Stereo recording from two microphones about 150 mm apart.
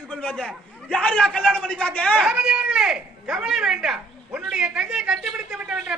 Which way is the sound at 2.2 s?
5° right (ahead or behind).